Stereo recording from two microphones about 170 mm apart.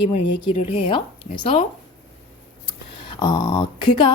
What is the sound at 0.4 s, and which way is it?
Speech, 35° left (ahead or behind).